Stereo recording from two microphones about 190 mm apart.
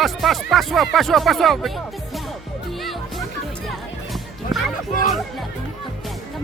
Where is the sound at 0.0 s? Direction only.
Centre (ahead or behind).